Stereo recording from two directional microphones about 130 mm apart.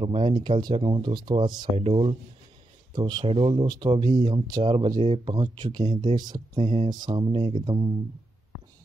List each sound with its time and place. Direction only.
0.0 s speech: 45° right (ahead or behind)
2.9 s speech: 35° right (ahead or behind)
3.6 s speech: 30° right (ahead or behind)